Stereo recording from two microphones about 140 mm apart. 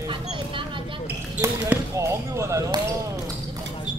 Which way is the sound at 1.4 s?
20° right (ahead or behind).